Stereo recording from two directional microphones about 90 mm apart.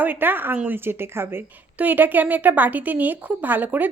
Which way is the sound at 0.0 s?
20° right (ahead or behind).